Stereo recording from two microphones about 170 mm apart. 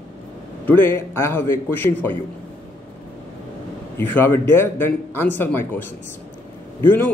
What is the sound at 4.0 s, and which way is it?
A man's voice, 10° left (ahead or behind).